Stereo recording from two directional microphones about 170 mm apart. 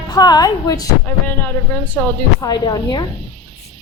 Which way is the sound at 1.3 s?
10° left (ahead or behind).